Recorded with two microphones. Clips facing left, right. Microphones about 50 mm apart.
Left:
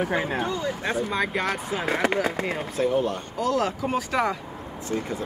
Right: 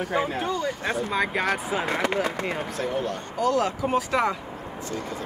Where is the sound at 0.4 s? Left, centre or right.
Centre.